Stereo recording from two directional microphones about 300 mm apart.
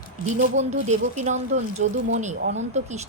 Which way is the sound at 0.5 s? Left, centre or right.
Right.